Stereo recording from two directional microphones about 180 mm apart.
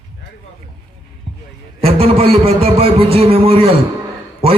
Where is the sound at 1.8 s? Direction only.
30° right (ahead or behind).